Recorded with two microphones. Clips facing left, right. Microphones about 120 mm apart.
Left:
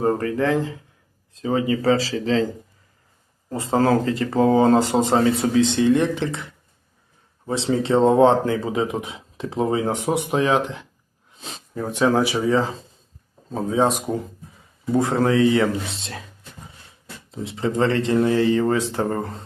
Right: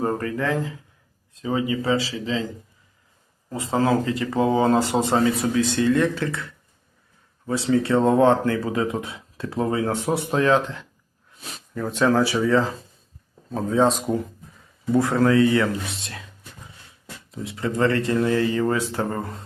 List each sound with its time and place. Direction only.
0.0 s speech: 30° left (ahead or behind)
3.5 s speech: 35° left (ahead or behind); by 10.8 s 15° left (ahead or behind)
11.3 s a sound: 25° left (ahead or behind)
11.9 s speech: 15° left (ahead or behind)
17.3 s speech: 25° left (ahead or behind)